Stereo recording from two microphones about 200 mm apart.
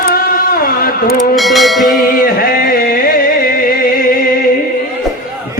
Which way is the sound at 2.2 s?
45° left (ahead or behind).